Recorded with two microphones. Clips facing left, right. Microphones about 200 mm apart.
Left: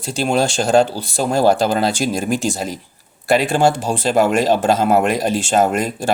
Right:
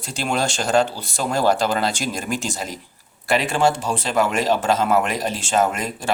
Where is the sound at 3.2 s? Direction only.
35° left (ahead or behind).